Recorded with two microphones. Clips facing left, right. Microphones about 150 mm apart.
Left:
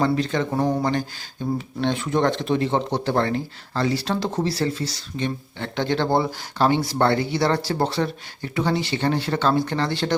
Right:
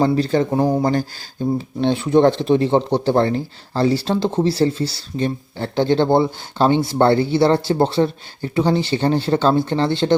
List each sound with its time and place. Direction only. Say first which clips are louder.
0.0 s speech: right 5 dB; 35° right (ahead or behind)
1.5 s speech: right 4 dB; 35° right (ahead or behind)